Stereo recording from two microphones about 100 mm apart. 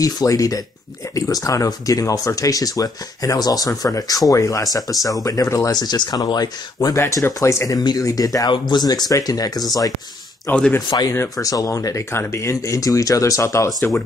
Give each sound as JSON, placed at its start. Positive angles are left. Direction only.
{"t": 0.0, "sound": "speech", "side_deg": 35}
{"t": 5.8, "sound": "speech", "side_deg": 45}
{"t": 7.0, "sound": "speech", "side_deg": 30}
{"t": 10.5, "sound": "speech", "side_deg": 25}
{"t": 10.9, "sound": "speech", "side_deg": 45}